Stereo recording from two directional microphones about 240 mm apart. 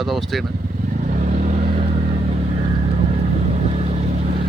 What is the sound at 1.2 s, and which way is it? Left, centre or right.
Vehicle, right.